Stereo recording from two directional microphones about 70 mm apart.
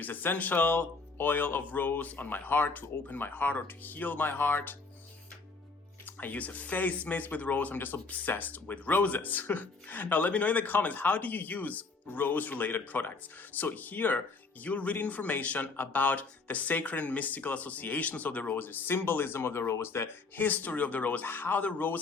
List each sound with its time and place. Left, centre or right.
0.0 s speech: left
6.1 s speech: left